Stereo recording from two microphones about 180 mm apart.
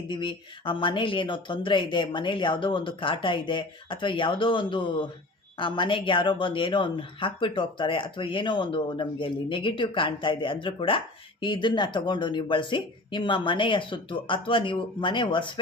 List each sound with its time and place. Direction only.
0.1 s speech: 25° left (ahead or behind)